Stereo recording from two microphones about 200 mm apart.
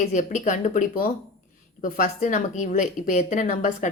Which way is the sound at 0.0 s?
35° left (ahead or behind).